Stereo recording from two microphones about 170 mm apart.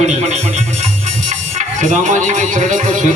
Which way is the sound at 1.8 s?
45° right (ahead or behind).